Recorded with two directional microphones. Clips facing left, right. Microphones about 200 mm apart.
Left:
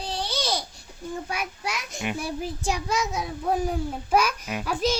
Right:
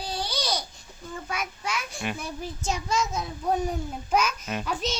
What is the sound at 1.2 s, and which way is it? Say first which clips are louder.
Child singing: left 1 dB; 10° left (ahead or behind).